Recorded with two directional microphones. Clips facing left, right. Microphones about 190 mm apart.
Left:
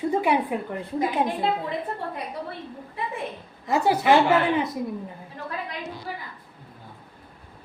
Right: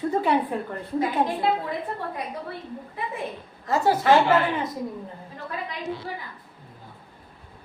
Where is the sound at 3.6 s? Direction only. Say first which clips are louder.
Even; 15° left (ahead or behind).